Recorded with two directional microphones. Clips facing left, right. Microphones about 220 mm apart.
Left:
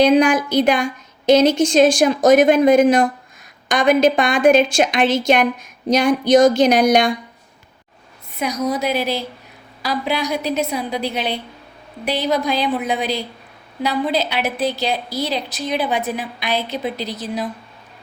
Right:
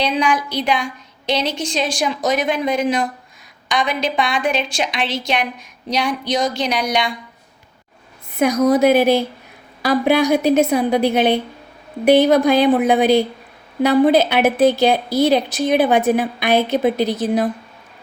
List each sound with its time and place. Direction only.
0.0 s speech: 50° left (ahead or behind)
8.4 s a woman's voice: 50° right (ahead or behind)